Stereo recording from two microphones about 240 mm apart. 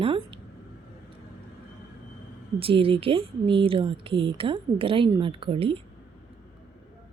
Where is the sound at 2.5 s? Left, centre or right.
Right.